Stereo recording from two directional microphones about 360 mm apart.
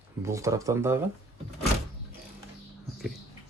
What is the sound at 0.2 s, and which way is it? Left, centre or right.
Speech, centre.